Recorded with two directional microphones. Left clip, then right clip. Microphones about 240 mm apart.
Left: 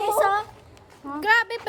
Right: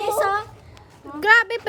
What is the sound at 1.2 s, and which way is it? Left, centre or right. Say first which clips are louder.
Speech: right 5 dB; centre.